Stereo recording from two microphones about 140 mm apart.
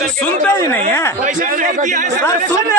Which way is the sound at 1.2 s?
65° right (ahead or behind).